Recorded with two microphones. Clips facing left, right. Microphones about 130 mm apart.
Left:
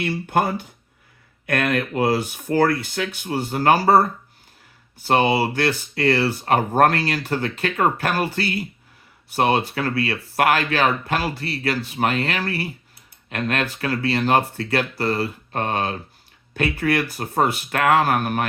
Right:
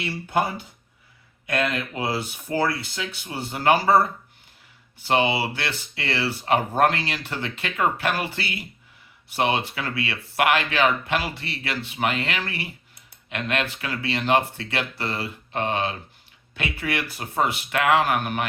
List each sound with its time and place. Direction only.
0.3 s speech: 50° left (ahead or behind)